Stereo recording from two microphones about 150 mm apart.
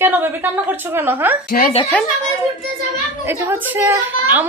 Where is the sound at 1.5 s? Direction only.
70° left (ahead or behind).